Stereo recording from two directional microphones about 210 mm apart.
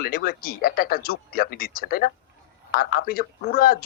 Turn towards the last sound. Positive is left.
turn(degrees=45)  # may be behind; listen again after turning